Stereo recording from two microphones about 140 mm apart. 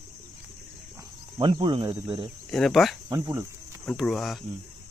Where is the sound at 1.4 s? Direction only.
35° right (ahead or behind).